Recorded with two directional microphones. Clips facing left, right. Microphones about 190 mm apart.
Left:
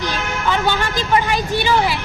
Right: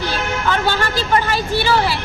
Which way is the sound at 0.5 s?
15° left (ahead or behind).